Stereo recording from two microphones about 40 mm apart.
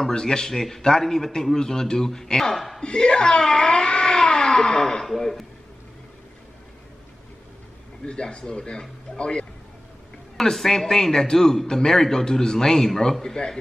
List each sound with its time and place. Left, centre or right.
0.1 s a man's voice: centre
2.5 s a woman's voice: centre
2.8 s speech: centre
5.0 s a man's voice: centre
8.0 s speech: left
10.3 s a man's voice: centre